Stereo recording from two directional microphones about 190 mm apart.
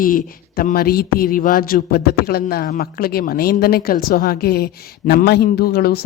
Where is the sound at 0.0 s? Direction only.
45° left (ahead or behind).